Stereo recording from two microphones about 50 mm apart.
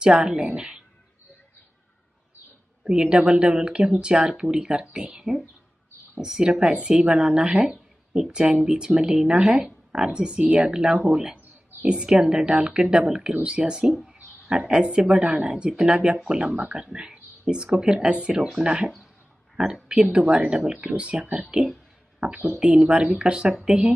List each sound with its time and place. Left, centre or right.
0.0 s speech: centre
2.8 s speech: centre